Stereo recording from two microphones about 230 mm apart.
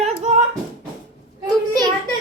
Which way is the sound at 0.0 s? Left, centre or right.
Right.